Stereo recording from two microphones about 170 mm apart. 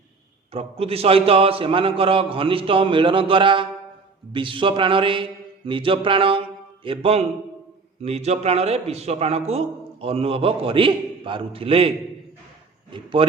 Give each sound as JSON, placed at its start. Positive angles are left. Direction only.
{"t": 0.5, "sound": "a man's voice", "side_deg": -35}
{"t": 12.9, "sound": "speech", "side_deg": -30}